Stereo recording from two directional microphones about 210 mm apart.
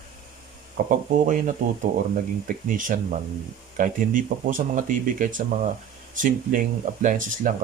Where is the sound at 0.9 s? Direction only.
35° right (ahead or behind).